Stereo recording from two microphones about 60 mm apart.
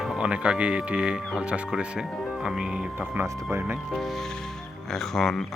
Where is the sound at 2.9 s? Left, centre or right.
Right.